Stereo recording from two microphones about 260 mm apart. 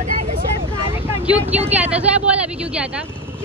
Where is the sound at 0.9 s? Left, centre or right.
Centre.